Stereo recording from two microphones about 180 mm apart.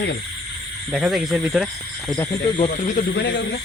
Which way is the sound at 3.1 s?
75° left (ahead or behind).